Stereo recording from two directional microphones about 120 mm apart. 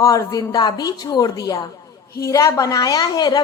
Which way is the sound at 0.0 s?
30° left (ahead or behind).